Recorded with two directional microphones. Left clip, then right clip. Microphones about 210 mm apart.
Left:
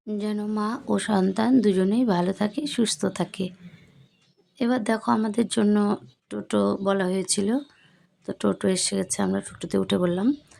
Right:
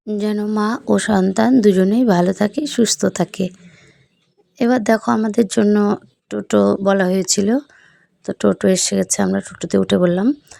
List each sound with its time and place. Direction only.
0.0 s speech: 30° right (ahead or behind)
4.5 s speech: 30° right (ahead or behind)